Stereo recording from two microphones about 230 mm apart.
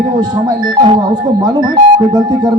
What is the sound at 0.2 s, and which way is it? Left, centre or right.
Speech, centre.